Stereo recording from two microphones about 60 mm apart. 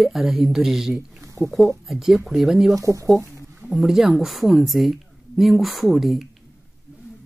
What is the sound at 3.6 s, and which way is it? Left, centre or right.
Speech, centre.